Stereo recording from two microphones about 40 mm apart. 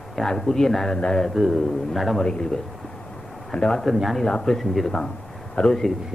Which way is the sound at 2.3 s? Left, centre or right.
Centre.